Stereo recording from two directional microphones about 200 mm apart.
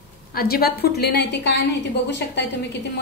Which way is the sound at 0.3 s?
50° left (ahead or behind).